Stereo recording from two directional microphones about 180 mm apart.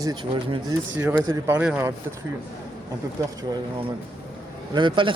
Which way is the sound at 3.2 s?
15° right (ahead or behind).